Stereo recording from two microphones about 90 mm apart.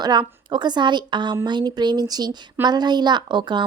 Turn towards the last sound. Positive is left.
turn(degrees=-55)  # may be behind; listen again after turning